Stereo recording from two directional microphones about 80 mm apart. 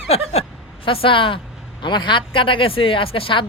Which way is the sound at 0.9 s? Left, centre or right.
Left.